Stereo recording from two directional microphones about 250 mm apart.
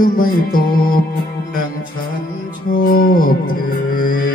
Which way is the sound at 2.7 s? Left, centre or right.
Left.